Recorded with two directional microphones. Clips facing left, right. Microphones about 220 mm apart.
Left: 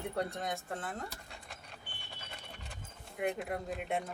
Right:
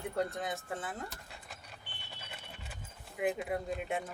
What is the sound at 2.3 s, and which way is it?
Clip-clop, 5° right (ahead or behind).